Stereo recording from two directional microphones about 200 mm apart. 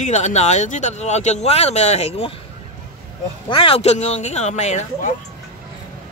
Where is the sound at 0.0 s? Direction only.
35° left (ahead or behind).